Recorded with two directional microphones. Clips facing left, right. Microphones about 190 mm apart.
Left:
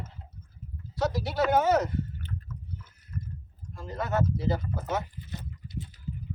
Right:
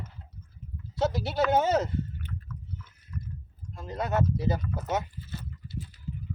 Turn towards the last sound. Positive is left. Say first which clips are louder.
# even
turn(degrees=20)  # may be behind; listen again after turning